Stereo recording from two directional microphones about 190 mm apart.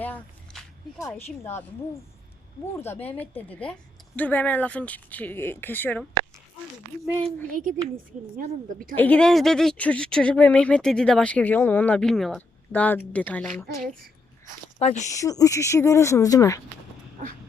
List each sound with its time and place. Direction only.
0.0 s a sound: 10° left (ahead or behind)
2.7 s speech: 10° left (ahead or behind)
7.5 s a woman's voice: 45° right (ahead or behind)
9.0 s speech: 5° left (ahead or behind)
14.8 s speech: 35° left (ahead or behind)
15.2 s speech: 20° left (ahead or behind)